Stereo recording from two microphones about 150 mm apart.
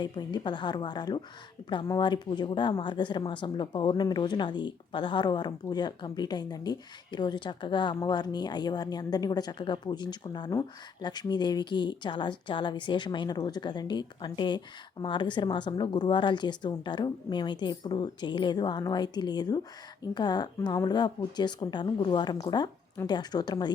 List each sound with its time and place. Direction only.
0.0 s speech: 30° left (ahead or behind)